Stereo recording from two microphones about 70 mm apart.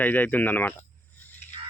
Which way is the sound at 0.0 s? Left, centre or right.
Left.